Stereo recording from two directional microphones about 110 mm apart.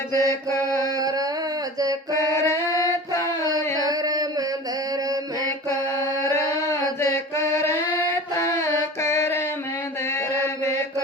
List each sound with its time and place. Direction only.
0.1 s mantra: 25° left (ahead or behind)
0.9 s a sound: 35° right (ahead or behind)
2.1 s music: 25° left (ahead or behind)
3.8 s chant: 35° right (ahead or behind)
6.2 s singing: 25° left (ahead or behind)
7.0 s a sound: 25° left (ahead or behind)
10.1 s chant: 25° left (ahead or behind)